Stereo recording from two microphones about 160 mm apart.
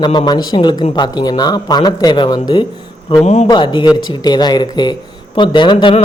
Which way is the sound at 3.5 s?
30° left (ahead or behind).